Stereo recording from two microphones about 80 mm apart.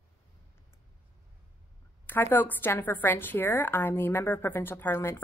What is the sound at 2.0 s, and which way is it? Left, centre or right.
A woman's voice, left.